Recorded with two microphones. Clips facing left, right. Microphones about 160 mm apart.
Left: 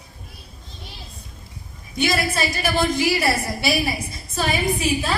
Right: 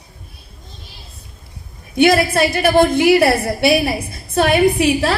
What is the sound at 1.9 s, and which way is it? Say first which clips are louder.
A woman's voice: right 9 dB; 60° right (ahead or behind).